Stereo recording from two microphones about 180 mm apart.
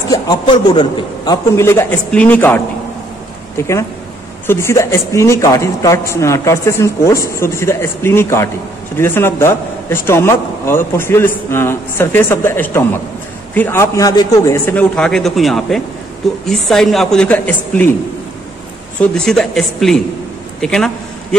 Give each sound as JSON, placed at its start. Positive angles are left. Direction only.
{"t": 0.1, "sound": "a man's voice", "side_deg": 25}
{"t": 18.9, "sound": "a woman's voice", "side_deg": 5}